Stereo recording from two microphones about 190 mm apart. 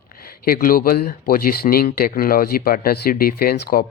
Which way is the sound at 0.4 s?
50° left (ahead or behind).